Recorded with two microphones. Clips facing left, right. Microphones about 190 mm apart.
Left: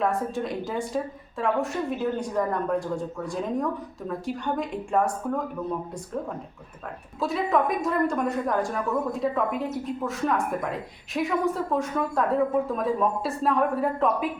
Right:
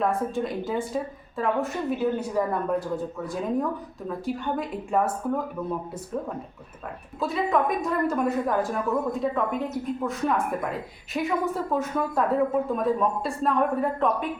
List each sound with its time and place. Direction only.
0.0 s a woman's voice: centre (ahead or behind)
7.2 s a woman's voice: centre (ahead or behind)